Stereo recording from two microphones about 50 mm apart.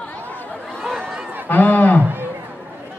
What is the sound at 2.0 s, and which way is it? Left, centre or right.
Music, right.